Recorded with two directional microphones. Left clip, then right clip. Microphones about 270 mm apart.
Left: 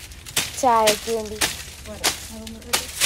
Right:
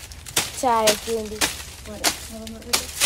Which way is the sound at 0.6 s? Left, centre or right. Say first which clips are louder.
Left 3 dB; centre.